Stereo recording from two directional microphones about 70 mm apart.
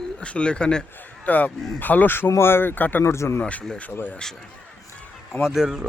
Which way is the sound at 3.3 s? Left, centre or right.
Centre.